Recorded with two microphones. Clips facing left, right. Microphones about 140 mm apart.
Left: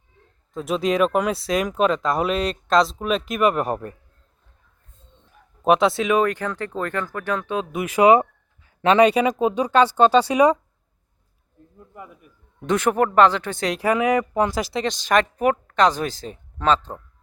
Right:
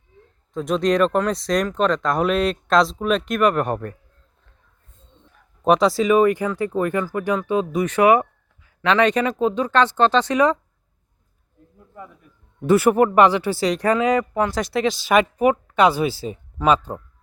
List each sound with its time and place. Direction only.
0.5 s speech: 5° left (ahead or behind)
5.6 s speech: centre (ahead or behind); by 8.7 s 25° left (ahead or behind)
9.0 s speech: 10° left (ahead or behind)
11.9 s speech: 10° left (ahead or behind)
12.6 s speech: 5° right (ahead or behind)
13.9 s speech: 15° left (ahead or behind)
14.6 s speech: centre (ahead or behind)